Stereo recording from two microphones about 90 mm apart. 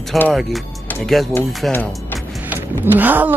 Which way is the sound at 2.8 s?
20° right (ahead or behind).